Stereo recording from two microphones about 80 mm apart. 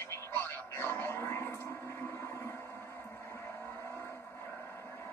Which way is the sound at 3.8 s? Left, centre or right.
Left.